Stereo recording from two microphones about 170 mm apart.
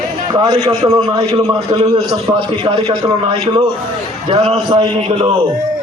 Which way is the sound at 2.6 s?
30° right (ahead or behind).